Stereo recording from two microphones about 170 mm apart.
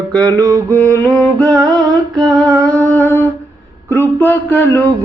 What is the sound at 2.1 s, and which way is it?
Mantra, centre (ahead or behind).